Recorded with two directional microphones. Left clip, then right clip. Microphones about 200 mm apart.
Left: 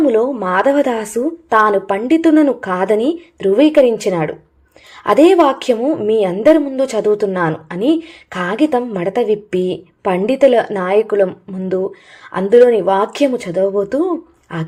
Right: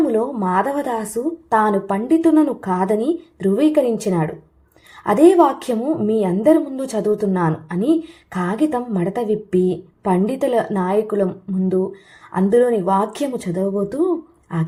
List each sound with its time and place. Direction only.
0.1 s a woman's voice: 25° left (ahead or behind)
12.3 s a woman's voice: 20° left (ahead or behind)